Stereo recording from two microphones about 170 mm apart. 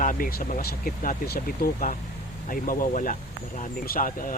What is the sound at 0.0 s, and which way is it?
Speech, 55° left (ahead or behind).